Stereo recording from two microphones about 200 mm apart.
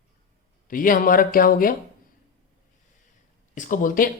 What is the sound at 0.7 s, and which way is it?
Speech, 45° left (ahead or behind).